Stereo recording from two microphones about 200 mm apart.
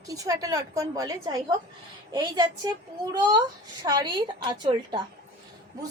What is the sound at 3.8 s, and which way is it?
A woman's voice, 20° right (ahead or behind).